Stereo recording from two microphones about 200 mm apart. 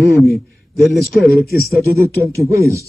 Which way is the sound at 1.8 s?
15° right (ahead or behind).